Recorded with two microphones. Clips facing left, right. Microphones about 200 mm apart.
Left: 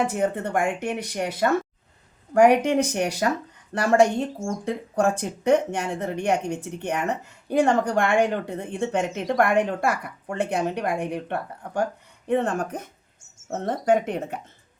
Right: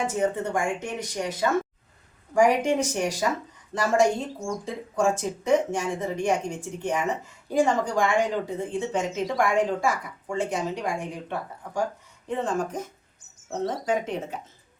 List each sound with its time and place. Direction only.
0.1 s speech: 60° left (ahead or behind)
4.6 s speech: 65° left (ahead or behind)